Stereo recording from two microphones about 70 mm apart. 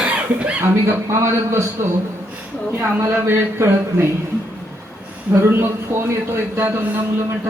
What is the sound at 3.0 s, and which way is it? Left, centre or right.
Speech, right.